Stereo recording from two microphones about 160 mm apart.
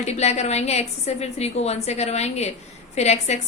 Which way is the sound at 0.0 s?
45° left (ahead or behind).